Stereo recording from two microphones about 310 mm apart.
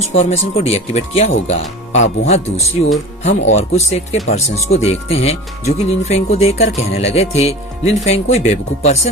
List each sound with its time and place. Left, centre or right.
0.2 s speech: centre